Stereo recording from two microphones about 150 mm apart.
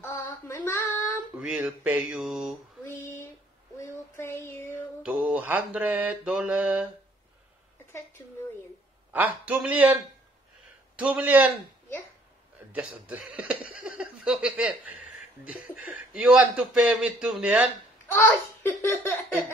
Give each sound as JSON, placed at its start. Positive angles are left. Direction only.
{"t": 0.0, "sound": "child singing", "side_deg": 15}
{"t": 1.3, "sound": "a man's voice", "side_deg": -10}
{"t": 2.8, "sound": "a sound", "side_deg": 15}
{"t": 3.8, "sound": "child singing", "side_deg": 20}
{"t": 5.0, "sound": "mantra", "side_deg": -10}
{"t": 9.5, "sound": "a man's voice", "side_deg": -10}
{"t": 11.0, "sound": "a man's voice", "side_deg": -10}
{"t": 12.7, "sound": "a man's voice", "side_deg": -10}
{"t": 18.1, "sound": "babbling", "side_deg": 15}